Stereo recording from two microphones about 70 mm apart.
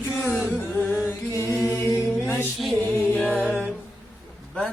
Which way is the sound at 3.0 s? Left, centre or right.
Centre.